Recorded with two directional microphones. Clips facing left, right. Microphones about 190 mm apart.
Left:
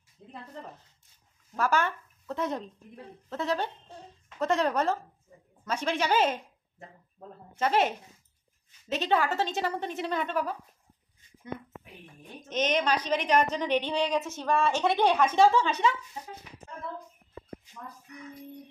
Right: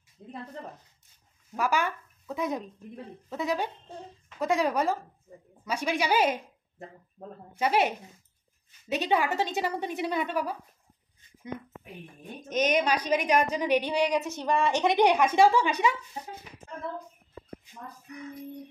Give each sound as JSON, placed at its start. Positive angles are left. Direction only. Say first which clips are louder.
{"t": 1.6, "sound": "a woman's voice", "louder": "left 1 dB", "side_deg": -10}
{"t": 7.2, "sound": "speech", "louder": "right 3 dB", "side_deg": -40}
{"t": 7.5, "sound": "a woman's voice", "louder": "even", "side_deg": -10}
{"t": 12.4, "sound": "a woman's voice", "louder": "right 2 dB", "side_deg": -10}